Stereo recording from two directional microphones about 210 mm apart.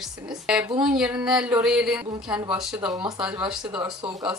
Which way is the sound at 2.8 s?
20° right (ahead or behind).